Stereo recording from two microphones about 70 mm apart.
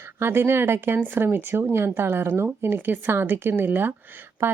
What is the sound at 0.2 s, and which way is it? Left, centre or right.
A woman's voice, right.